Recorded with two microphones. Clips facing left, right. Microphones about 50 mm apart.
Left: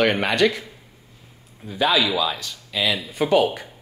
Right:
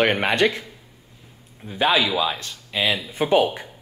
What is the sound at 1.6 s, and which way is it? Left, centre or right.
Speech, right.